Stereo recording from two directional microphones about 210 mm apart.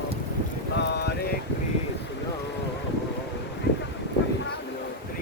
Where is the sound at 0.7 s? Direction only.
55° left (ahead or behind).